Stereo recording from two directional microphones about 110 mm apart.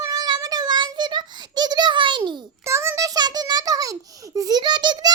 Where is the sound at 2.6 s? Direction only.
25° right (ahead or behind).